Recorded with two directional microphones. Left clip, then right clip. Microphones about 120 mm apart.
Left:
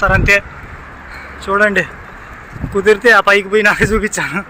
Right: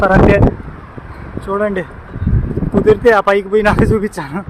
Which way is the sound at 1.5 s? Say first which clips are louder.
Left 5 dB; 20° right (ahead or behind).